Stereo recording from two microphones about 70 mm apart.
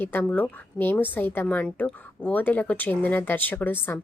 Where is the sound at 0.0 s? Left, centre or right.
Left.